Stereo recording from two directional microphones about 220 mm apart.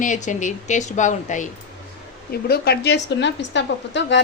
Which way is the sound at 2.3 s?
45° left (ahead or behind).